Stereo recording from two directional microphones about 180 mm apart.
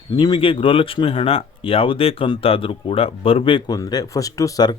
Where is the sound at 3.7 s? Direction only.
20° left (ahead or behind).